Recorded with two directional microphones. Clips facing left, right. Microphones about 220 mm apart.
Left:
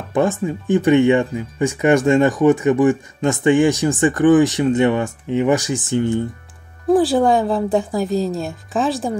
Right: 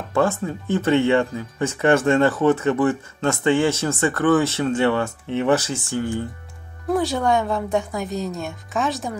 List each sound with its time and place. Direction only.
0.1 s speech: 20° left (ahead or behind)
6.9 s a woman's voice: 30° left (ahead or behind)